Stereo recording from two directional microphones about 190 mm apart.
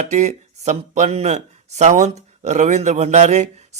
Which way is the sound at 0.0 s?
35° right (ahead or behind).